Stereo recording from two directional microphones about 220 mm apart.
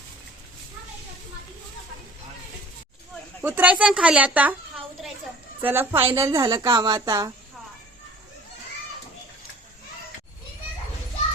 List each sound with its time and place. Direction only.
3.4 s a woman's voice: 10° right (ahead or behind)
5.6 s a woman's voice: 10° right (ahead or behind)